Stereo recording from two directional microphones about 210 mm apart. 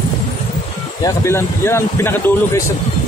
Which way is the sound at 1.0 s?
15° left (ahead or behind).